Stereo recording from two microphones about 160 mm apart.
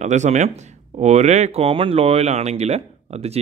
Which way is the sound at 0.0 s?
45° right (ahead or behind).